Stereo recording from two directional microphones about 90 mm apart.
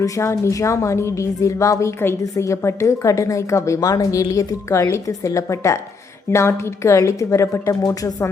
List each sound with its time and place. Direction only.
0.0 s a woman's voice: 30° left (ahead or behind)